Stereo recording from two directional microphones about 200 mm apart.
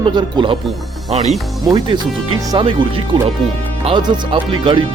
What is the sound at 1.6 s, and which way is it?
Speech, 20° right (ahead or behind).